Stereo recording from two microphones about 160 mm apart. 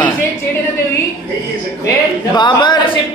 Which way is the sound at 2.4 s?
30° left (ahead or behind).